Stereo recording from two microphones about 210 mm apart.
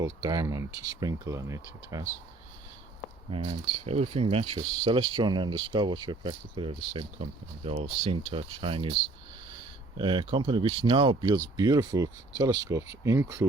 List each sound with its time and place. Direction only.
0.0 s speech: 15° right (ahead or behind)
3.3 s speech: 25° right (ahead or behind)
10.0 s speech: 20° right (ahead or behind)